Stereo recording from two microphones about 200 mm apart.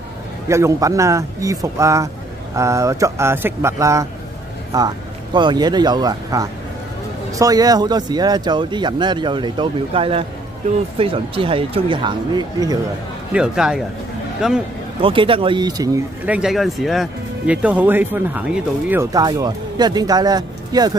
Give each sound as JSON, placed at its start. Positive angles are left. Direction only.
{"t": 0.5, "sound": "speech", "side_deg": -15}
{"t": 13.3, "sound": "speech", "side_deg": -5}
{"t": 15.0, "sound": "speech", "side_deg": -25}
{"t": 16.3, "sound": "speech", "side_deg": -5}